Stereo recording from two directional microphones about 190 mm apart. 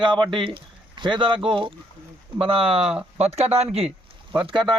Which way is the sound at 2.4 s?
30° right (ahead or behind).